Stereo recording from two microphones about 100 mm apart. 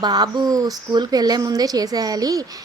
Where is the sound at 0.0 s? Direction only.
45° right (ahead or behind).